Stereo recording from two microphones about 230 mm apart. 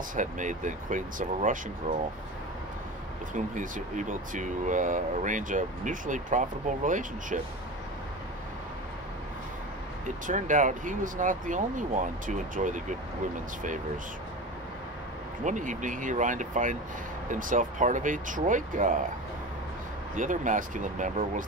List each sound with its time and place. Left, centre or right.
0.1 s speech: right
3.3 s speech: right
10.0 s speech: right
15.4 s speech: right
20.2 s speech: right